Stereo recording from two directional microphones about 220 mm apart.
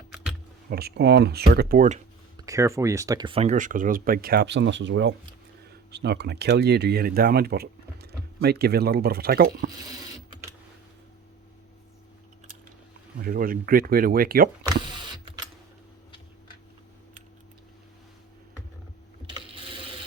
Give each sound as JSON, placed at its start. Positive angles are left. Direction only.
{"t": 0.7, "sound": "speech", "side_deg": -45}
{"t": 2.5, "sound": "speech", "side_deg": -15}
{"t": 13.1, "sound": "speech", "side_deg": -40}
{"t": 14.6, "sound": "mechanisms", "side_deg": -20}
{"t": 19.3, "sound": "a sound", "side_deg": -25}